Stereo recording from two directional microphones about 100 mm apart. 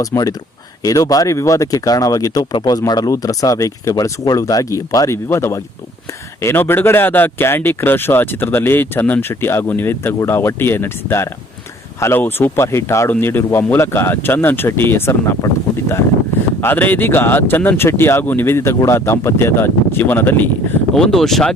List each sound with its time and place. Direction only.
0.0 s speech: 35° left (ahead or behind)
16.6 s speech: 20° left (ahead or behind)
20.9 s speech: 5° left (ahead or behind)